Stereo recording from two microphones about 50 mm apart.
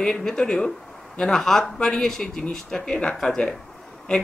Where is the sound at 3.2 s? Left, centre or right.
Centre.